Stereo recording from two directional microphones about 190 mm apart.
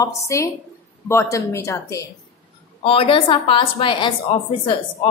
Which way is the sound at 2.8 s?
30° left (ahead or behind).